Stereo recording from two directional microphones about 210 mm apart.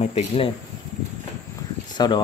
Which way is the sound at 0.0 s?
30° left (ahead or behind).